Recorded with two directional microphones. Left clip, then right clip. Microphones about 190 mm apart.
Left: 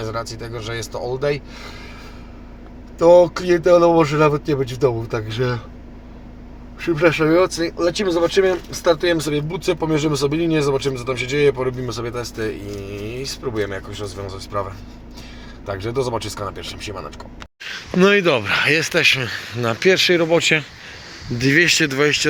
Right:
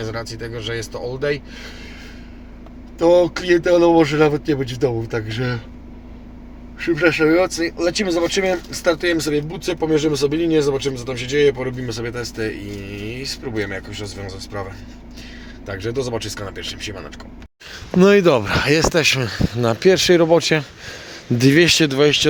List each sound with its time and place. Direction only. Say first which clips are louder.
0.1 s speech: left 1 dB; centre (ahead or behind)
3.2 s speech: left 1 dB; centre (ahead or behind)
6.7 s speech: even; centre (ahead or behind)
15.8 s speech: left 1 dB; 5° left (ahead or behind)
17.7 s speech: right 1 dB; 30° right (ahead or behind); by 22.3 s 15° right (ahead or behind)